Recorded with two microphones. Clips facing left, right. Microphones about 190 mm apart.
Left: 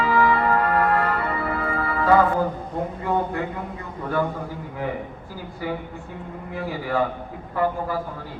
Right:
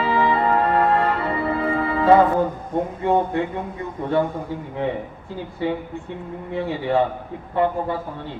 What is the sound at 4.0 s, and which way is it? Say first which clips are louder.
A man's voice: right 3 dB; 25° right (ahead or behind).